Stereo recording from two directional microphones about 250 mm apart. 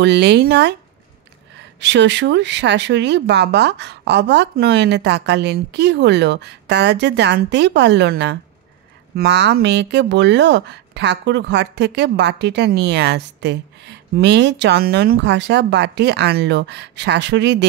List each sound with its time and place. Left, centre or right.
0.0 s speech: right
1.8 s speech: right